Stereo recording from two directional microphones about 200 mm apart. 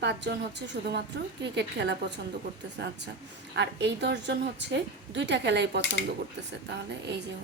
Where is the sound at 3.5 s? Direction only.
60° right (ahead or behind).